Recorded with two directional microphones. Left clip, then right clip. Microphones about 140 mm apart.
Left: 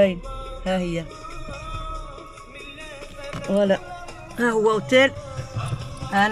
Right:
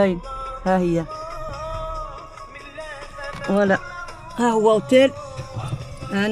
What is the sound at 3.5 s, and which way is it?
Speech, 10° left (ahead or behind).